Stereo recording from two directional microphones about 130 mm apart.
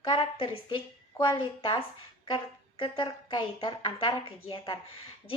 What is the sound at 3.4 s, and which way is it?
A woman's voice, 40° left (ahead or behind).